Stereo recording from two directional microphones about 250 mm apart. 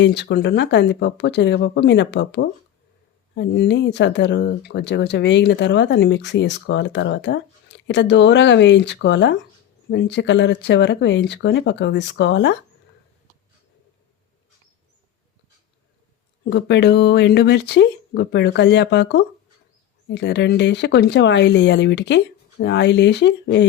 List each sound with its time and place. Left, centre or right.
0.0 s speech: left
16.5 s speech: left